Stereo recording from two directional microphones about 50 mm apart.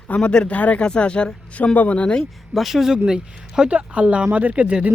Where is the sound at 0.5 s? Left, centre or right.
Left.